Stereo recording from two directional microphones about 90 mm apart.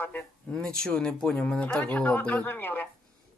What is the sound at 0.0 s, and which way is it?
Speech, 20° left (ahead or behind).